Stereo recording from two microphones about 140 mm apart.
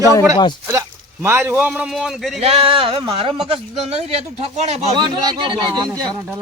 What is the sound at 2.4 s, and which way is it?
Speech, 45° right (ahead or behind).